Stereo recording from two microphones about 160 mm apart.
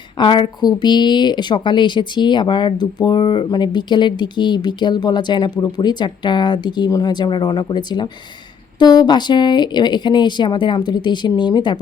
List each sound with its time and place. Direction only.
0.2 s a woman's voice: 30° left (ahead or behind)